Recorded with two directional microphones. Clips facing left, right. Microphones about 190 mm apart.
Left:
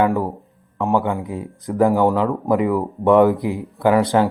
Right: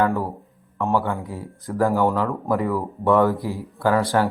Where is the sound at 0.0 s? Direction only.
15° left (ahead or behind).